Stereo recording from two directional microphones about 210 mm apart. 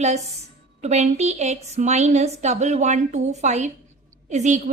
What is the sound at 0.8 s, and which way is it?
A woman's voice, 30° right (ahead or behind).